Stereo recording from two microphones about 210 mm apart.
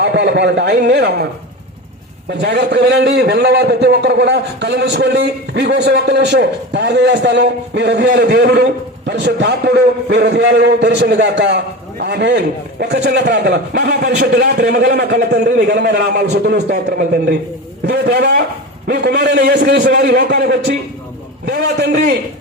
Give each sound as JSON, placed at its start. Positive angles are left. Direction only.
{"t": 0.0, "sound": "a man's voice", "side_deg": -55}
{"t": 2.4, "sound": "a man's voice", "side_deg": -50}